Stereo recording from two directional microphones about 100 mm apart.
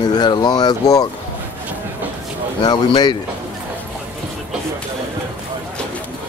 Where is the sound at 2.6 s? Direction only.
45° left (ahead or behind).